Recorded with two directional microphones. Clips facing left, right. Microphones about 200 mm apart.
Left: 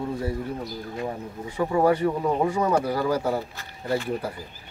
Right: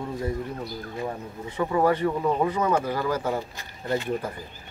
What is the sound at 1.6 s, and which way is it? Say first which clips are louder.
Speech: left 1 dB; 10° left (ahead or behind).